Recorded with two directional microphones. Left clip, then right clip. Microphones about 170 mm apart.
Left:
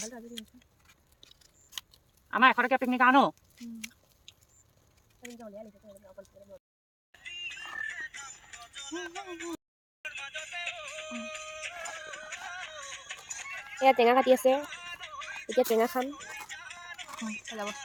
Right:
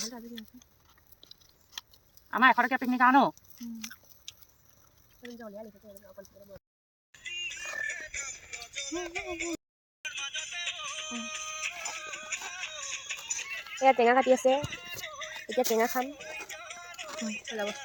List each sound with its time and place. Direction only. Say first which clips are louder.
2.3 s speech: even; 40° left (ahead or behind)
4.3 s a sound: right 7 dB; 10° right (ahead or behind)
7.1 s music: right 3 dB; centre (ahead or behind)
13.9 s speech: left 1 dB; 5° left (ahead or behind)
16.0 s a sound: even; 5° left (ahead or behind)
17.0 s speech: right 4 dB; 10° right (ahead or behind)